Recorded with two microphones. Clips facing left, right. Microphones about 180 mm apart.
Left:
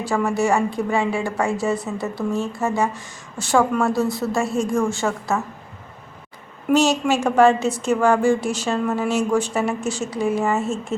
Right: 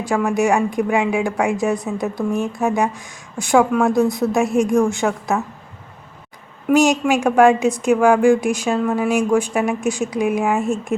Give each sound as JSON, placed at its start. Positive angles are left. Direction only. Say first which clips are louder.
{"t": 0.3, "sound": "a woman's voice", "louder": "right 3 dB", "side_deg": -15}
{"t": 6.7, "sound": "a woman's voice", "louder": "right 3 dB", "side_deg": -15}